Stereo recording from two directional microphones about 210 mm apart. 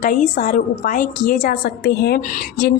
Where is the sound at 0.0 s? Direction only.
40° left (ahead or behind).